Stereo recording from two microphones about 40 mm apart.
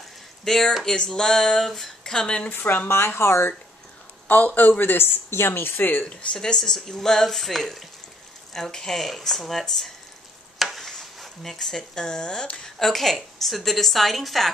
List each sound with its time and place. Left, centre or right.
0.5 s speech: centre
2.1 s speech: left
2.5 s speech: left
2.9 s speech: left
4.3 s speech: left
5.8 s speech: left
6.3 s a woman's voice: centre
10.6 s a sound: centre
10.9 s stir: centre
11.5 s speech: centre
12.6 s a woman's voice: centre